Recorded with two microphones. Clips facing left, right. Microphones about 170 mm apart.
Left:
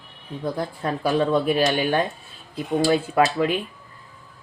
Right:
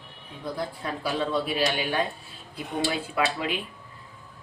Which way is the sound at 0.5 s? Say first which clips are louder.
Left 5 dB; 50° left (ahead or behind).